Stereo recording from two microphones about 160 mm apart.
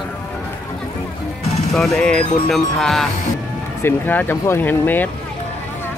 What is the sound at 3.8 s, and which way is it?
Speech, 15° left (ahead or behind).